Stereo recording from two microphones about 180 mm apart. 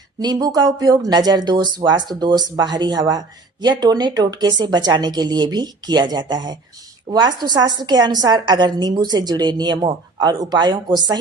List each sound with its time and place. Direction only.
0.2 s speech: 20° right (ahead or behind)